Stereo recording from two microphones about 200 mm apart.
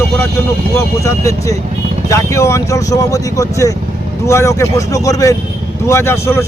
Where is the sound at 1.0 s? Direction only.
15° left (ahead or behind).